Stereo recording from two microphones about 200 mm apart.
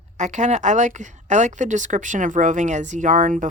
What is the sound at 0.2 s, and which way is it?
A woman's voice, 35° right (ahead or behind).